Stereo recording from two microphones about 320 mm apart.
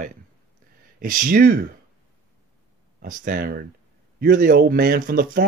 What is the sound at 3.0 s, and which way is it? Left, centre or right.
Speech, right.